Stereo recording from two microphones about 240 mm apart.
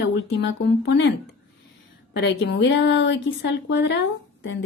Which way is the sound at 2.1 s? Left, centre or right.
Left.